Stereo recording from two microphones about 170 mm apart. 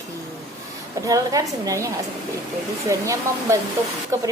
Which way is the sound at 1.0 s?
20° right (ahead or behind).